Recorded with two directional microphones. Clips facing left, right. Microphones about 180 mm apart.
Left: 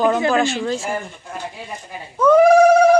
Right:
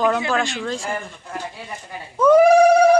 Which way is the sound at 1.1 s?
15° left (ahead or behind).